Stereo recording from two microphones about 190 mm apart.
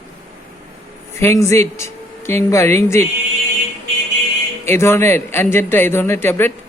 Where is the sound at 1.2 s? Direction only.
15° left (ahead or behind).